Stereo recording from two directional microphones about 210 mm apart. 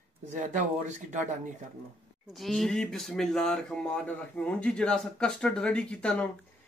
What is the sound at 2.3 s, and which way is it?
Speech, centre (ahead or behind).